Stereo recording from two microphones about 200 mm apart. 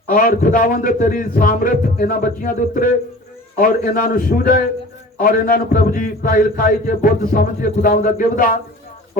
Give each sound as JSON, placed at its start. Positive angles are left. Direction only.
{"t": 0.1, "sound": "a man's voice", "side_deg": 45}